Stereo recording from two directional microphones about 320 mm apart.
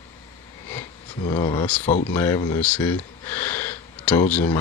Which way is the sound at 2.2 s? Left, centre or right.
Centre.